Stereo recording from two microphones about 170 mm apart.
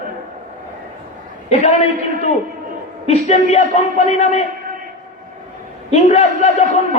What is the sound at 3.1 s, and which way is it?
A man's voice, 45° left (ahead or behind).